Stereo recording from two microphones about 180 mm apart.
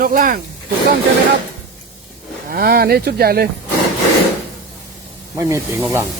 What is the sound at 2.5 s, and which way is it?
Speech, 55° right (ahead or behind).